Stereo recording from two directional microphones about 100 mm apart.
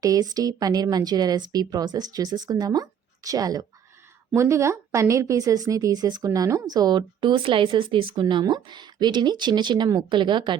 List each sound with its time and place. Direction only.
0.0 s a woman's voice: 40° right (ahead or behind)